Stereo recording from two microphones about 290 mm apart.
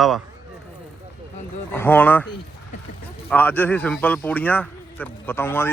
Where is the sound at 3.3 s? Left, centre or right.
Centre.